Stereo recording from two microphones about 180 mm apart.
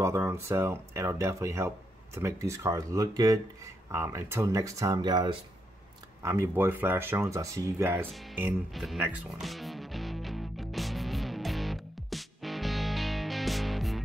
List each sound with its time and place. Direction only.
0.0 s speech: 15° right (ahead or behind)
8.1 s speech: centre (ahead or behind)
9.4 s music: centre (ahead or behind)